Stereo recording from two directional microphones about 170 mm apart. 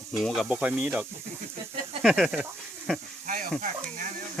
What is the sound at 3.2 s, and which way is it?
Speech, 55° right (ahead or behind).